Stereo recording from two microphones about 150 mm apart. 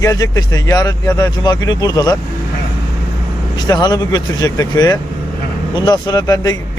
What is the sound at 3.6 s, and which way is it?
Speech, 30° left (ahead or behind).